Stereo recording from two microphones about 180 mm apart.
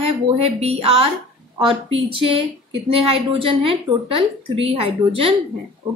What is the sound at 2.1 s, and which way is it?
A woman's voice, 30° right (ahead or behind).